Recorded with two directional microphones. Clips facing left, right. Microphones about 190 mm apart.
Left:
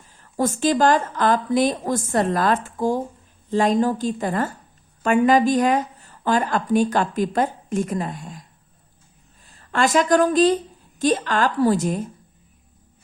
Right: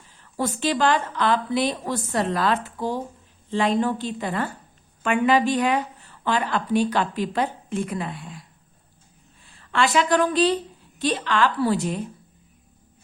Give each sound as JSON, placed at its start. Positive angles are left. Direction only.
{"t": 0.2, "sound": "a woman's voice", "side_deg": 45}